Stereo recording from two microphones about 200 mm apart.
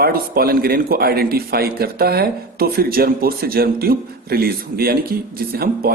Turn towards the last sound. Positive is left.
turn(degrees=-50)  # may be behind; listen again after turning